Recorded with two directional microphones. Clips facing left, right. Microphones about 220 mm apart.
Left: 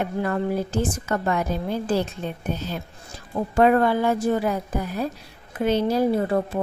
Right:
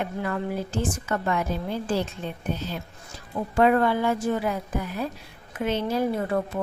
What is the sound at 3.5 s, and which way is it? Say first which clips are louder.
A woman's voice: left 2 dB; 45° left (ahead or behind).